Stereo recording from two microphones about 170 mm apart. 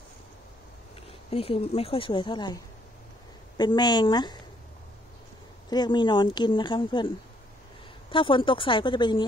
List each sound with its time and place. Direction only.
1.3 s speech: 35° left (ahead or behind)
5.7 s speech: 25° left (ahead or behind)
8.1 s speech: 30° left (ahead or behind)